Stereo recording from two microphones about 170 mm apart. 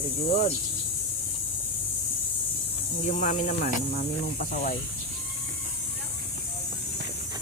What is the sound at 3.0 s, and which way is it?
Speech, 45° left (ahead or behind).